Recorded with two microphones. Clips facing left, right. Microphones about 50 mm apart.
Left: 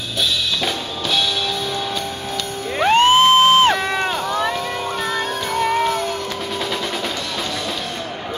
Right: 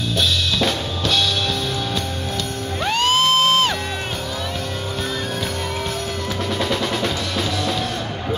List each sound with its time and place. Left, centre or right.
2.9 s music: left
5.6 s music: left